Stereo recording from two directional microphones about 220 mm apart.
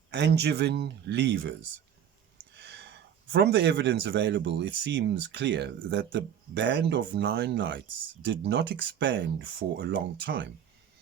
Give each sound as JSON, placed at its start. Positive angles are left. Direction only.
{"t": 0.1, "sound": "speech", "side_deg": -50}
{"t": 2.6, "sound": "speech", "side_deg": -50}